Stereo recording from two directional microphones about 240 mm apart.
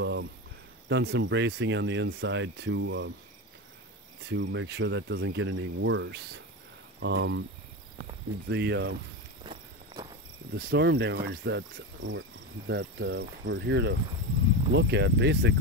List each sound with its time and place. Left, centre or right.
0.0 s cricket: right
0.8 s speech: right
4.3 s speech: right
8.5 s speech: right
9.4 s walk: centre
10.5 s speech: right